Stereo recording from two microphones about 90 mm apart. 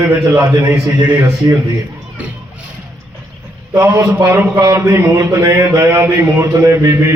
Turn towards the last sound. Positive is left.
turn(degrees=-30)  # may be behind; listen again after turning